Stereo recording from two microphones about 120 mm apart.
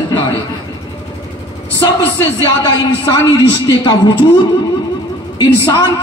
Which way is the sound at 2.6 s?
35° left (ahead or behind).